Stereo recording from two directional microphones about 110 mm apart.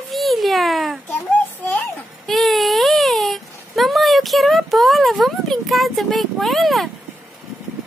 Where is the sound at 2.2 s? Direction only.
Centre (ahead or behind).